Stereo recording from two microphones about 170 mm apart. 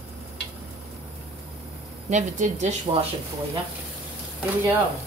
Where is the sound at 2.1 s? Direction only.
45° right (ahead or behind).